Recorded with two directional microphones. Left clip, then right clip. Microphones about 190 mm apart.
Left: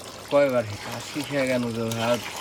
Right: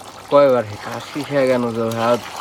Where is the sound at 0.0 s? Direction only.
10° left (ahead or behind).